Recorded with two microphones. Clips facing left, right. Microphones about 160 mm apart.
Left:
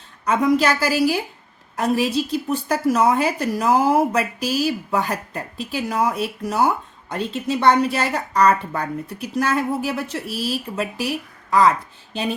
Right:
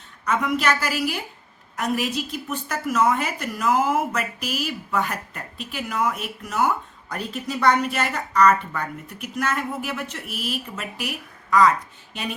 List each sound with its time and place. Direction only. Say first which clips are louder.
0.3 s a woman's voice: left 5 dB; 35° left (ahead or behind)